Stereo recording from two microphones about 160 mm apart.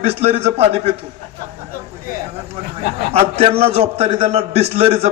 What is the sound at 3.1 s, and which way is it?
A man's voice, 40° right (ahead or behind).